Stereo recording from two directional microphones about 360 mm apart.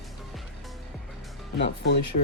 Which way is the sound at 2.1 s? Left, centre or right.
Left.